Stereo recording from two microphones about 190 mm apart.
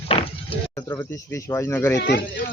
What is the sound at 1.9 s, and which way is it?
Speech, 65° left (ahead or behind).